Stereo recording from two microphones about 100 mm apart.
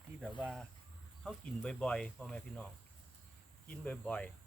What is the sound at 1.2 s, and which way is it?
Speech, 10° left (ahead or behind).